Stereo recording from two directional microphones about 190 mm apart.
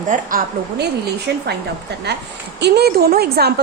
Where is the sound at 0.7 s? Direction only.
60° right (ahead or behind).